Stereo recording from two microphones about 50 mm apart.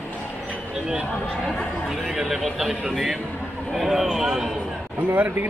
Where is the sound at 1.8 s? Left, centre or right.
Centre.